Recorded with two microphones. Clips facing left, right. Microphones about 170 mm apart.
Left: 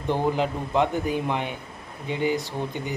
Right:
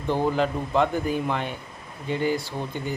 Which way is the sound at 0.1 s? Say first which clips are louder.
Right 1 dB; 15° left (ahead or behind).